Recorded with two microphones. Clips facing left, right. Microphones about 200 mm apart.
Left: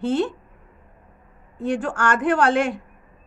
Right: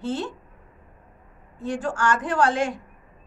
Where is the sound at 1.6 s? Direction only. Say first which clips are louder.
Left 3 dB; 60° left (ahead or behind).